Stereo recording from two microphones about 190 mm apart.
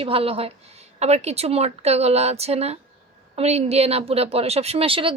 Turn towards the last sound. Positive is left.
turn(degrees=-30)  # may be behind; listen again after turning